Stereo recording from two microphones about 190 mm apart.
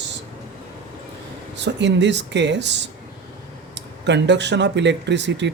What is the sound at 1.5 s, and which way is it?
Speech, 65° right (ahead or behind).